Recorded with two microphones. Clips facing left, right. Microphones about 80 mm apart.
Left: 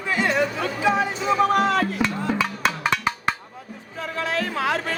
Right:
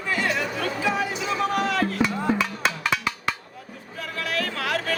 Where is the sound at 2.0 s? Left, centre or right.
Centre.